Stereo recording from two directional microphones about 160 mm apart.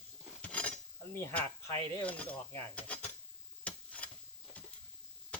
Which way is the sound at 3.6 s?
10° left (ahead or behind).